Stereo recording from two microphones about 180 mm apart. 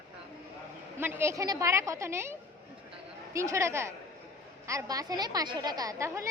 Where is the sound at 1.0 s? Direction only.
10° right (ahead or behind).